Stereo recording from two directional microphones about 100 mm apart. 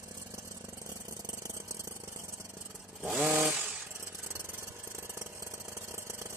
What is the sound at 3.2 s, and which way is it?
Chainsaw, 10° right (ahead or behind).